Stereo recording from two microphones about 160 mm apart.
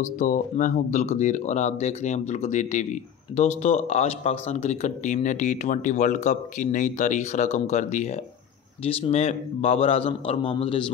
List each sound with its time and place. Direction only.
0.0 s a man's voice: 55° left (ahead or behind); by 10.8 s 35° left (ahead or behind)